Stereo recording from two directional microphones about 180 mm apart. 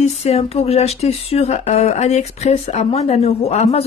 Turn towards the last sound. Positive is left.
turn(degrees=35)  # may be behind; listen again after turning